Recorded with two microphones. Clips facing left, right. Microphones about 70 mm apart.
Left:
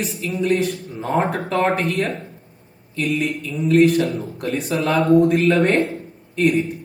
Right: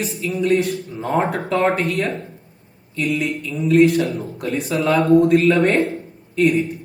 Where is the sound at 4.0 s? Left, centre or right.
Right.